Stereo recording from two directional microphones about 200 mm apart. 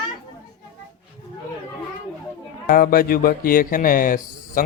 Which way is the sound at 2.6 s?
45° left (ahead or behind).